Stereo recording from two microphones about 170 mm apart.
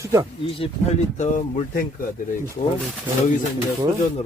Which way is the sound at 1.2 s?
50° left (ahead or behind).